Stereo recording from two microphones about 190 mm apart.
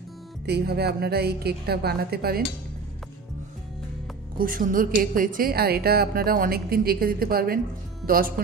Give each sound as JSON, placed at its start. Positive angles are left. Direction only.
{"t": 0.5, "sound": "a woman's voice", "side_deg": -55}
{"t": 4.4, "sound": "a woman's voice", "side_deg": -45}